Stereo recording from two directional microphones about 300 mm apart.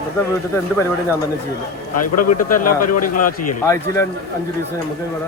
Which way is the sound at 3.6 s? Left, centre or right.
Centre.